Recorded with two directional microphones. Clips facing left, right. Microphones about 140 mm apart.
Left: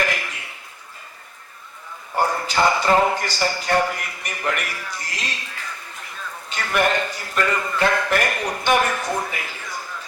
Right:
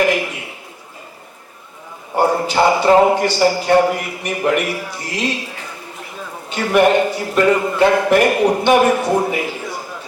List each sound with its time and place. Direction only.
0.0 s a sound: 15° right (ahead or behind)
2.2 s speech: 25° right (ahead or behind)
2.8 s a man's voice: 15° right (ahead or behind)
6.1 s a sound: 15° right (ahead or behind)
7.1 s speech: 15° right (ahead or behind)
8.1 s speech: 15° right (ahead or behind)
8.6 s a man's voice: 10° right (ahead or behind)
9.0 s speech: 30° right (ahead or behind)
9.3 s a sound: 15° right (ahead or behind)